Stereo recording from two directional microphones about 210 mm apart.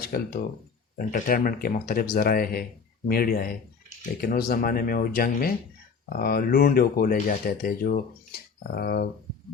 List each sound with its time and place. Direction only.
0.1 s speech: 45° left (ahead or behind)